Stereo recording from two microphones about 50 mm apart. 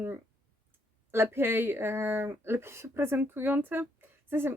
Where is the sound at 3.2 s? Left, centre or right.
Right.